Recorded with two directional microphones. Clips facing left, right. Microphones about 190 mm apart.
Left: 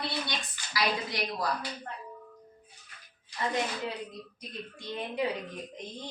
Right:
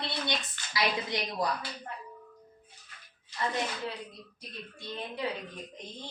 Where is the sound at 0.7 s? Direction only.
20° right (ahead or behind).